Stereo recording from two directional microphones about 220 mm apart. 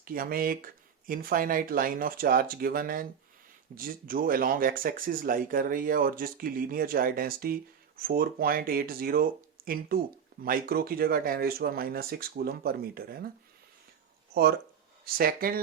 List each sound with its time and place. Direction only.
0.0 s speech: 40° right (ahead or behind)
9.6 s a sound: 40° right (ahead or behind)
10.4 s speech: 40° right (ahead or behind)
15.0 s speech: 40° right (ahead or behind)